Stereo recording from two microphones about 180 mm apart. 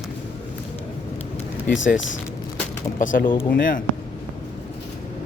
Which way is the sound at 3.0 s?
50° left (ahead or behind).